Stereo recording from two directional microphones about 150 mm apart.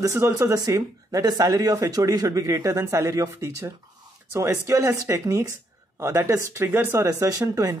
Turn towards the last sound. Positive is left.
turn(degrees=-25)  # may be behind; listen again after turning